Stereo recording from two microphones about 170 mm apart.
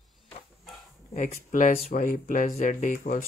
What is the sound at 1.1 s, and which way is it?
Speech, 50° left (ahead or behind).